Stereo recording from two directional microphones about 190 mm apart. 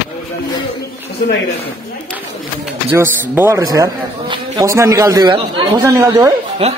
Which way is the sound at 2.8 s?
10° right (ahead or behind).